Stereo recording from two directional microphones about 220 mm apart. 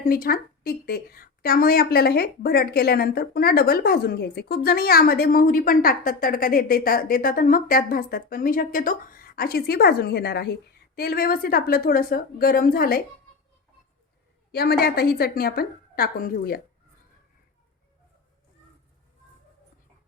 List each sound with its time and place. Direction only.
0.0 s a woman's voice: 40° left (ahead or behind)
14.5 s a woman's voice: 45° left (ahead or behind)